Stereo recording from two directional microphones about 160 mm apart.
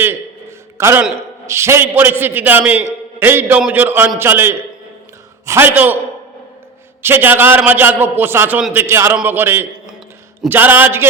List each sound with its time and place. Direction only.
0.8 s a man's voice: 15° right (ahead or behind)
7.0 s a man's voice: 15° right (ahead or behind)